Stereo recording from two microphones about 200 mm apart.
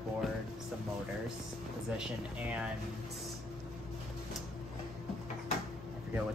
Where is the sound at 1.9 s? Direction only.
5° right (ahead or behind).